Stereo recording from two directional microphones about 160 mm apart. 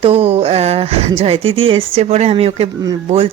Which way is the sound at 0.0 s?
35° right (ahead or behind).